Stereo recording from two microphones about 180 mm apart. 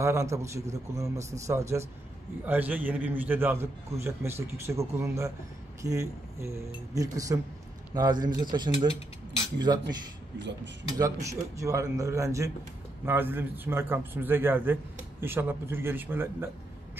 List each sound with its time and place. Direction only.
0.0 s a man's voice: 15° right (ahead or behind)
10.4 s speech: 80° right
11.0 s a man's voice: 15° right (ahead or behind)